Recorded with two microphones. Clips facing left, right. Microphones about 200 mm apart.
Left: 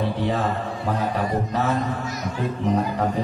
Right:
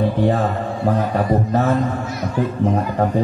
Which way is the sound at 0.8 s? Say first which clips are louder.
Right 6 dB; 50° right (ahead or behind).